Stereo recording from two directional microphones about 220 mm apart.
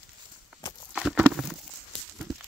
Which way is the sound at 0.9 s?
Centre (ahead or behind).